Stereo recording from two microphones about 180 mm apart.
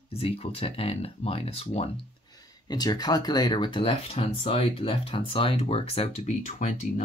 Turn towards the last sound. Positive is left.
turn(degrees=40)  # may be behind; listen again after turning